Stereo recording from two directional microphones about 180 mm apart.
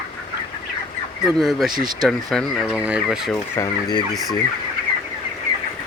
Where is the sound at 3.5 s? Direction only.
20° left (ahead or behind).